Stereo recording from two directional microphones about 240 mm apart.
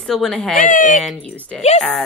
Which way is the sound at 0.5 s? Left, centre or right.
Left.